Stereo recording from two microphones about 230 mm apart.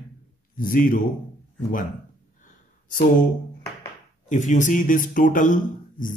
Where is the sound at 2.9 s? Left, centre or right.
Left.